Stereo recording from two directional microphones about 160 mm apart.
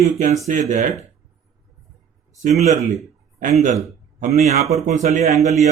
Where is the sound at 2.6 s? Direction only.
45° right (ahead or behind).